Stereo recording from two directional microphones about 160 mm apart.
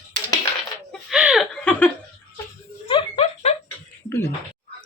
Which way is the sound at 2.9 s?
35° left (ahead or behind).